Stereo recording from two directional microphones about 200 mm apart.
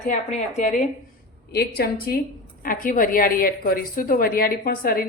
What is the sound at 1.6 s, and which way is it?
A woman's voice, 50° left (ahead or behind).